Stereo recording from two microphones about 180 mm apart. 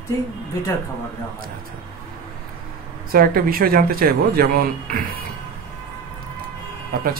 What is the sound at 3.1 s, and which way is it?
Speech, 55° right (ahead or behind).